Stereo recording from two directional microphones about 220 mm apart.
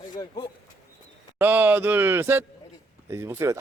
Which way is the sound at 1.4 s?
10° right (ahead or behind).